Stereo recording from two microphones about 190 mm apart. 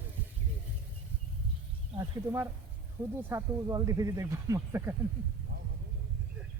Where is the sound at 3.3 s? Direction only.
15° right (ahead or behind).